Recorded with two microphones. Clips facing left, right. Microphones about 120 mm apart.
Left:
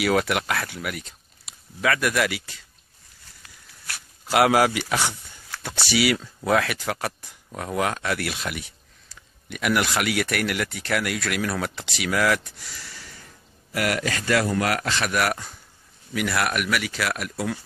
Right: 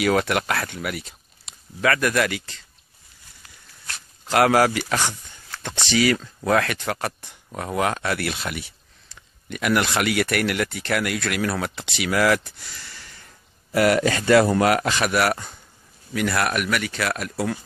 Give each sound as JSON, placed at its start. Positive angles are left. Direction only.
{"t": 0.0, "sound": "speech", "side_deg": 5}
{"t": 13.7, "sound": "a man's voice", "side_deg": -30}
{"t": 15.0, "sound": "speech", "side_deg": -5}